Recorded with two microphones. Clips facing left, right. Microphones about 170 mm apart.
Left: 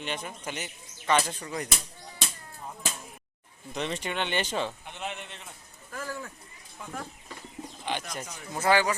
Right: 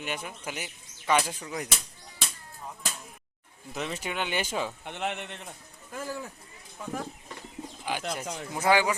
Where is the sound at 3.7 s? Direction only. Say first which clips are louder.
Left 1 dB; 5° right (ahead or behind).